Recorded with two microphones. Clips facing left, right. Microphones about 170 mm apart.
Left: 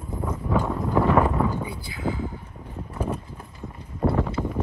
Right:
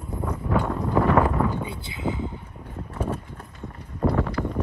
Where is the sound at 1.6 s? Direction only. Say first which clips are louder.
Even; 25° right (ahead or behind).